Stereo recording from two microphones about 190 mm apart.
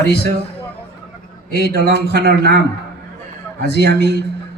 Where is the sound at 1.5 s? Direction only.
60° left (ahead or behind).